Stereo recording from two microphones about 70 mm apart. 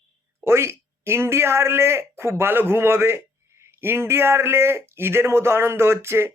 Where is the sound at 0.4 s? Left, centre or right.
Right.